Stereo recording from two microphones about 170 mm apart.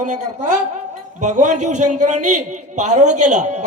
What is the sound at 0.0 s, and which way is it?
A man's voice, 45° right (ahead or behind).